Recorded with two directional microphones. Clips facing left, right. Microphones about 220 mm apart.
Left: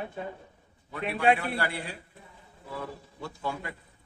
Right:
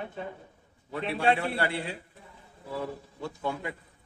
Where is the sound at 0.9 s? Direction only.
30° right (ahead or behind).